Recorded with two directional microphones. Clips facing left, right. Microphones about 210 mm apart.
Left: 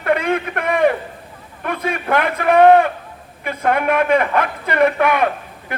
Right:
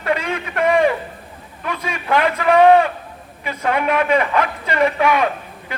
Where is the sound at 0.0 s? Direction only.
55° left (ahead or behind).